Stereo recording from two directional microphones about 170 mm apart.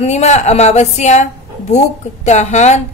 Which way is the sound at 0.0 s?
40° left (ahead or behind).